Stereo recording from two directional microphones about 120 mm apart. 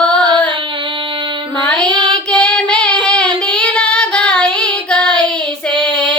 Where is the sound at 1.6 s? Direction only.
10° left (ahead or behind).